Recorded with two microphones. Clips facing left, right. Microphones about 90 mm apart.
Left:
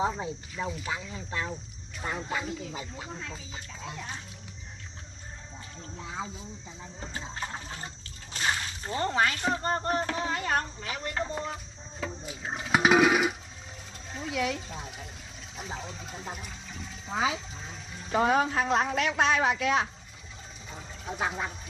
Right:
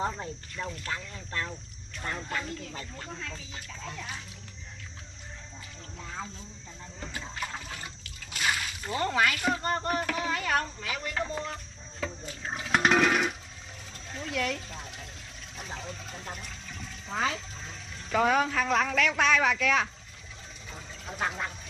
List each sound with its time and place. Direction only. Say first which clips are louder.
0.0 s speech: left 3 dB; 10° left (ahead or behind)
5.9 s speech: left 2 dB; 10° left (ahead or behind)
7.0 s a man's voice: even; 30° left (ahead or behind)
8.4 s splash: even; 30° left (ahead or behind)
9.6 s a man's voice: left 1 dB; 30° left (ahead or behind)
10.6 s speech: right 1 dB; 5° left (ahead or behind)
15.5 s water: left 1 dB; 5° left (ahead or behind)
18.1 s a man's voice: even; 25° left (ahead or behind)
20.7 s water: left 4 dB; 5° left (ahead or behind)